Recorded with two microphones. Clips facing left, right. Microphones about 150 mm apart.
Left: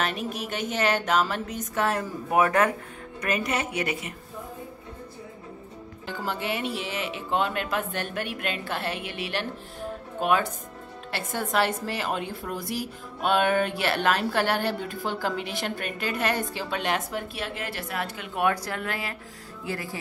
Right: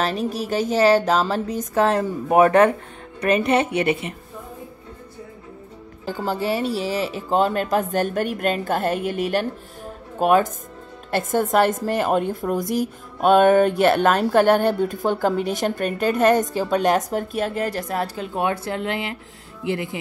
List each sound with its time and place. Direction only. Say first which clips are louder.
0.0 s speech: right 6 dB; 35° right (ahead or behind)
6.0 s a woman's voice: right 7 dB; 35° right (ahead or behind)